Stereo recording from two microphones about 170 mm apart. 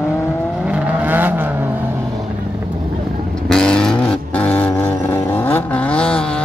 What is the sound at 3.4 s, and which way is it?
Vehicle, 5° left (ahead or behind).